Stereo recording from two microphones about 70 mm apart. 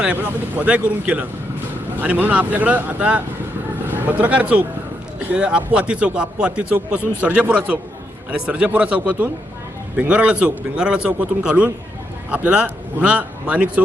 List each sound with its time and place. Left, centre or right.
0.0 s speech: right